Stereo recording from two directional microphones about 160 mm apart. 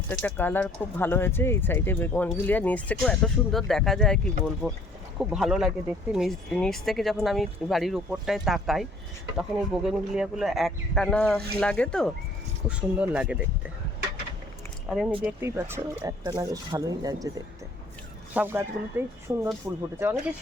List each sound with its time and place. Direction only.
0.1 s speech: 10° left (ahead or behind)
12.6 s speech: 5° right (ahead or behind)
15.2 s speech: 15° right (ahead or behind)